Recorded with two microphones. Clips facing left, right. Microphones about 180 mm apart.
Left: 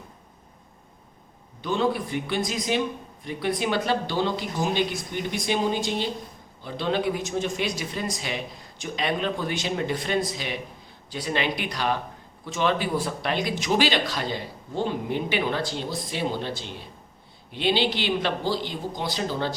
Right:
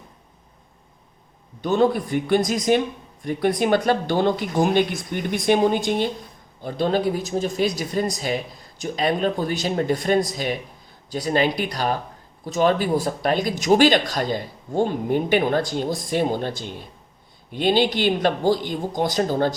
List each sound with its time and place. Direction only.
1.6 s speech: 45° right (ahead or behind)